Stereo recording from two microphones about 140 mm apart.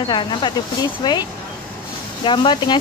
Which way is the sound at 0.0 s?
35° left (ahead or behind).